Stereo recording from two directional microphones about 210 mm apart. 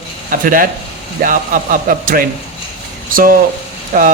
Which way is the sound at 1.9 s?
45° right (ahead or behind).